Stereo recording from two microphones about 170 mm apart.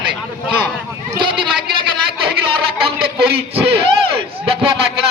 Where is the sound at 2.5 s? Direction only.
30° right (ahead or behind).